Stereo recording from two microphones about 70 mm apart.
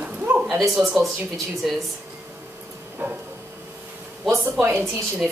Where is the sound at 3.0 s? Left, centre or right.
Right.